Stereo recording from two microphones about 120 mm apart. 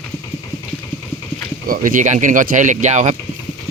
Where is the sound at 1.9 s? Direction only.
90° right.